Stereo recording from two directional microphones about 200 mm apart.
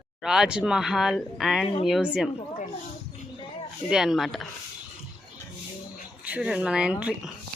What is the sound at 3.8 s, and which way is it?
Speech, centre (ahead or behind).